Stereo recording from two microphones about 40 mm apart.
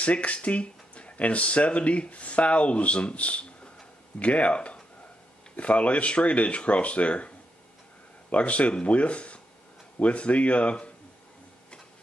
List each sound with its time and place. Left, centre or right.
0.0 s speech: left